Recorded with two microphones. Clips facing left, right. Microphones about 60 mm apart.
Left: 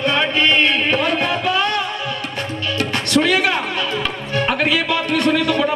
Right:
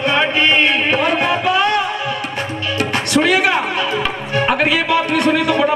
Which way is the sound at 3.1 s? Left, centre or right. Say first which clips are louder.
Right 2 dB; centre.